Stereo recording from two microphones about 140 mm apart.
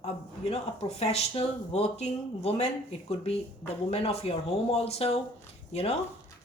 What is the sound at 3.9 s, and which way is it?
Speech, 45° left (ahead or behind).